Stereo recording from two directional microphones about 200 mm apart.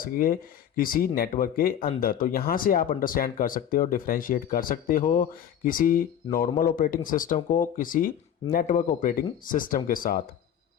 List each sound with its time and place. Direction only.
0.0 s speech: 45° left (ahead or behind)